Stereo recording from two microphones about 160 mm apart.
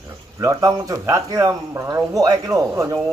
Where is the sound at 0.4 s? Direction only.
20° right (ahead or behind).